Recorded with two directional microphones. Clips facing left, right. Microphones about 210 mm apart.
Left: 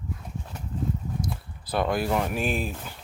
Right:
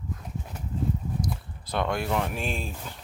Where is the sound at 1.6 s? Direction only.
5° left (ahead or behind).